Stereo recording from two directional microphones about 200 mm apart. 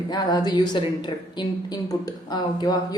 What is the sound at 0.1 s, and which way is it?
A woman's voice, 20° left (ahead or behind).